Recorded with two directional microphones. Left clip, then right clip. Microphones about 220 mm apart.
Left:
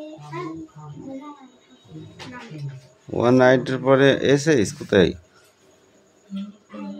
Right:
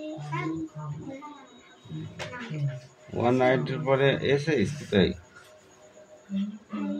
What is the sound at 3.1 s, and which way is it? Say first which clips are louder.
Speech: left 7 dB; 35° left (ahead or behind).